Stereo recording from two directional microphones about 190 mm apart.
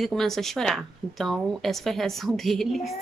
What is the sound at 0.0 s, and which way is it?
A woman's voice, centre (ahead or behind).